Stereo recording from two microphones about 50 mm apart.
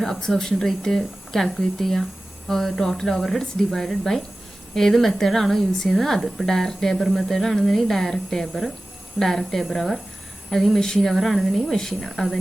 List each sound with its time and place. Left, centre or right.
0.0 s a woman's voice: centre